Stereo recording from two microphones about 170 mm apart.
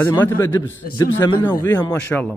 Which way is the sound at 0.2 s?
15° left (ahead or behind).